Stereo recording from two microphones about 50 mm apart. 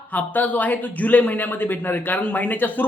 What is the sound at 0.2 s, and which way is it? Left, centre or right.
Speech, left.